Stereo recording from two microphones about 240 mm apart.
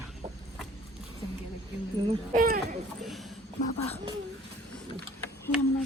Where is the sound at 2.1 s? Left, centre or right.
Right.